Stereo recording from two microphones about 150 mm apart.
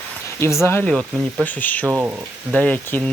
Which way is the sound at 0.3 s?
15° left (ahead or behind).